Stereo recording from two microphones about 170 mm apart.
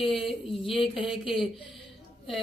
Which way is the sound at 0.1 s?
Centre (ahead or behind).